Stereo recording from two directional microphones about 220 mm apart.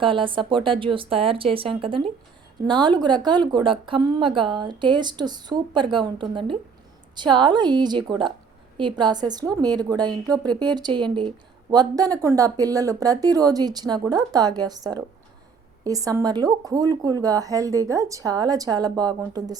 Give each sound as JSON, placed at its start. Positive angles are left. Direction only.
{"t": 0.0, "sound": "a woman's voice", "side_deg": -25}